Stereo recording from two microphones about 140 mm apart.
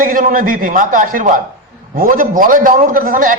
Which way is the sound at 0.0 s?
75° right (ahead or behind).